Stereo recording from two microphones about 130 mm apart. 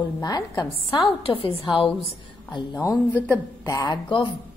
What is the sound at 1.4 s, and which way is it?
A woman's voice, 40° left (ahead or behind).